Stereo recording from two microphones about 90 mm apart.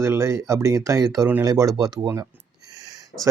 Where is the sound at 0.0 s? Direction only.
35° right (ahead or behind).